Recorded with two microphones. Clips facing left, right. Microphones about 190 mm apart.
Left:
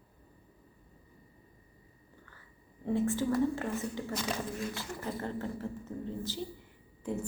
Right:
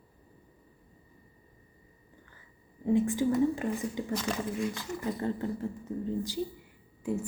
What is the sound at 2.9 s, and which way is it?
A woman's voice, 15° right (ahead or behind).